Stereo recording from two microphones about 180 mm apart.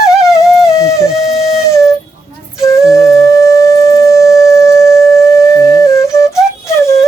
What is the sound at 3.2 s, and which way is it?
Sine wave, 15° left (ahead or behind).